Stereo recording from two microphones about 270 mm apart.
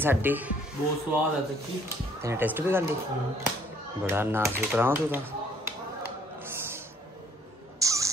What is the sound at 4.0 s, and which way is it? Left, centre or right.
Speech, centre.